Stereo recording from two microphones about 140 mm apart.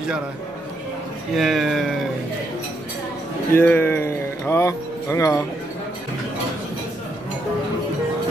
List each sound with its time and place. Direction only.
1.3 s speech: centre (ahead or behind)
3.5 s speech: 15° left (ahead or behind)